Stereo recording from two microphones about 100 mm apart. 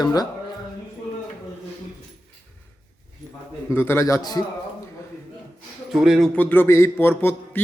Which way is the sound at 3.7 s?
25° left (ahead or behind).